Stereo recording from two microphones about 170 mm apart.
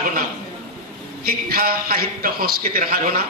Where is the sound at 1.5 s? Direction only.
60° right (ahead or behind).